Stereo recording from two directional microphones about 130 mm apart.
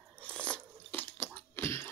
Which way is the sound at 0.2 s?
10° left (ahead or behind).